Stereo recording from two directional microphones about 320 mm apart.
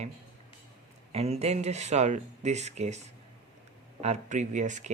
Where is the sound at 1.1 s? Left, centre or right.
Centre.